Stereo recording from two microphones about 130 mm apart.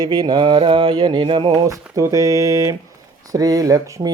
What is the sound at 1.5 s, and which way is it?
Speech, 25° right (ahead or behind).